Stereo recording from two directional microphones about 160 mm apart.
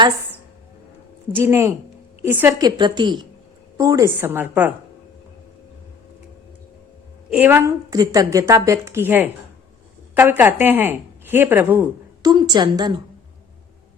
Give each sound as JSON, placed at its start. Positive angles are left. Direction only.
{"t": 1.3, "sound": "a woman's voice", "side_deg": -15}
{"t": 2.6, "sound": "a woman's voice", "side_deg": -25}
{"t": 7.3, "sound": "a woman's voice", "side_deg": -10}
{"t": 12.2, "sound": "a woman's voice", "side_deg": -25}